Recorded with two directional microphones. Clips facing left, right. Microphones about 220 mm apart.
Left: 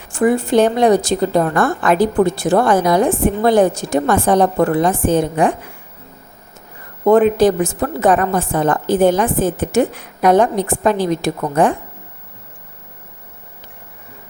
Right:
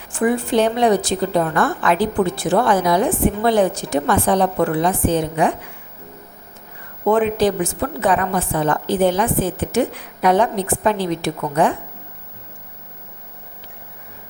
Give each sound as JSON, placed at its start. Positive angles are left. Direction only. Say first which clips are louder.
{"t": 0.1, "sound": "a woman's voice", "louder": "left 4 dB", "side_deg": 40}
{"t": 7.0, "sound": "a woman's voice", "louder": "left 5 dB", "side_deg": 45}